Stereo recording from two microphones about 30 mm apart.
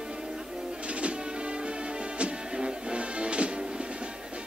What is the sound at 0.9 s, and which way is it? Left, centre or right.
Music, right.